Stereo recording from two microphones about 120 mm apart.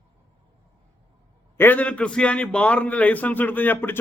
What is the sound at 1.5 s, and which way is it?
A man's voice, 15° left (ahead or behind).